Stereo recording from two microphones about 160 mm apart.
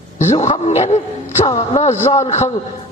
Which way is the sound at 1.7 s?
45° left (ahead or behind).